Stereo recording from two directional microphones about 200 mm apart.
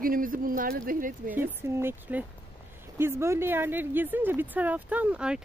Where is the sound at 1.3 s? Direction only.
10° right (ahead or behind).